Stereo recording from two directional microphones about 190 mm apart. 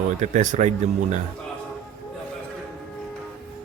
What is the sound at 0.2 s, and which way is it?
Speech, 40° right (ahead or behind).